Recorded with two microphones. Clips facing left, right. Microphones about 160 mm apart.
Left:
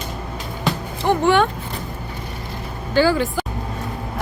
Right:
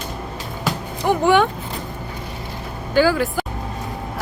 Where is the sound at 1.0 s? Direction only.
15° right (ahead or behind).